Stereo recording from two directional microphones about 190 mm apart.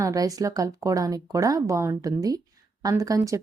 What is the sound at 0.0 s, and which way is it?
Speech, 20° right (ahead or behind).